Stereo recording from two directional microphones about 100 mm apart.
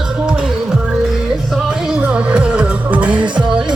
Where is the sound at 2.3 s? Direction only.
15° right (ahead or behind).